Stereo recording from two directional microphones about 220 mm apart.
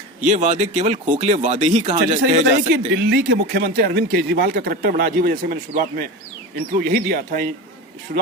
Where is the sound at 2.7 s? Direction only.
50° right (ahead or behind).